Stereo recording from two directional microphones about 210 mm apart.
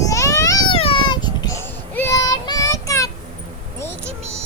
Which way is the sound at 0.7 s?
25° left (ahead or behind).